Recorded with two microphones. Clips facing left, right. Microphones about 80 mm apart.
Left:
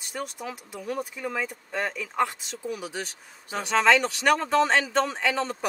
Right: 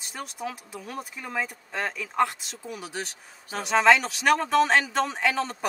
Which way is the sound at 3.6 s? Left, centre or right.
Centre.